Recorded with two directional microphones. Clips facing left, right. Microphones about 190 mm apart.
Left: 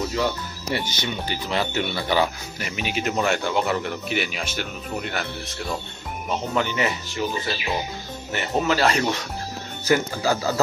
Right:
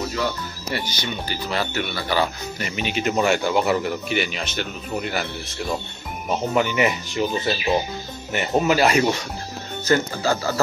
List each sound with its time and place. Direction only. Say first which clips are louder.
0.7 s speech: even; 20° left (ahead or behind)
2.6 s speech: right 2 dB; 5° left (ahead or behind)
6.5 s speech: right 4 dB; 15° right (ahead or behind)
9.8 s speech: right 1 dB; 10° left (ahead or behind)